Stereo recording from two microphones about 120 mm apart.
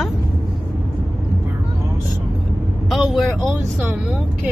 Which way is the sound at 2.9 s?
Centre (ahead or behind).